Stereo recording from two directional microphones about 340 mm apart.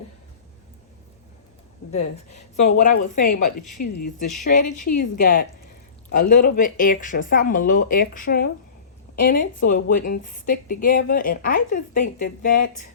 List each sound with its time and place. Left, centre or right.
1.9 s a woman's voice: centre
2.6 s a woman's voice: left
3.8 s a woman's voice: left